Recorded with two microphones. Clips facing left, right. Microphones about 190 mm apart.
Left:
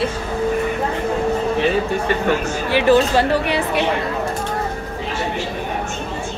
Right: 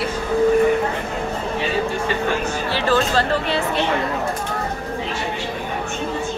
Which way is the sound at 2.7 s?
15° left (ahead or behind).